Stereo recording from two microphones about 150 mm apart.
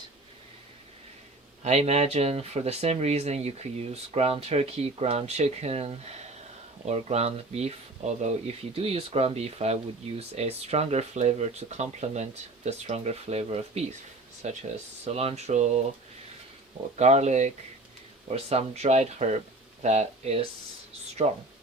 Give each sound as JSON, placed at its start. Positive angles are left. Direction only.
{"t": 1.6, "sound": "speech", "side_deg": -45}
{"t": 17.0, "sound": "speech", "side_deg": -50}